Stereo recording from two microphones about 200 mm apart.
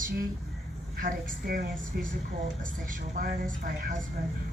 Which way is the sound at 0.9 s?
45° right (ahead or behind).